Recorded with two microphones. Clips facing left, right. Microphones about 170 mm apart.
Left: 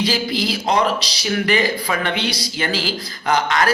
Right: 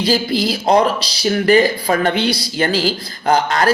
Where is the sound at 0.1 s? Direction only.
40° right (ahead or behind).